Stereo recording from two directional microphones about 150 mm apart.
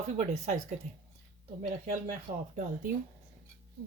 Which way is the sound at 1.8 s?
55° right (ahead or behind).